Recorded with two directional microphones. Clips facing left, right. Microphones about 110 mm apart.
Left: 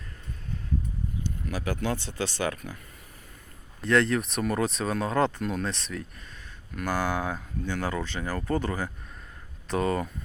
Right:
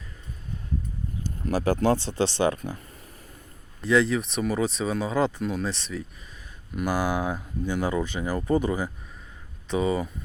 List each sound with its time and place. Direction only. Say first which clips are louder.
1.2 s speech: right 8 dB; 35° right (ahead or behind)
3.8 s speech: right 1 dB; centre (ahead or behind)